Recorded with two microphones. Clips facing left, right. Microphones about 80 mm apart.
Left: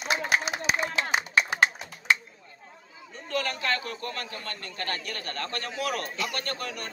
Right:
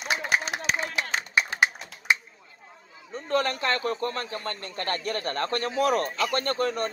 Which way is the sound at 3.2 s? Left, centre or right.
Right.